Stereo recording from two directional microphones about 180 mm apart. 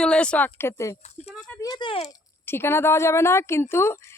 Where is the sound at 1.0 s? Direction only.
35° left (ahead or behind).